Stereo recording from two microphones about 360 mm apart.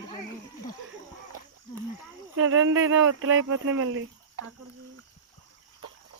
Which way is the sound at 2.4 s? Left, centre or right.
Right.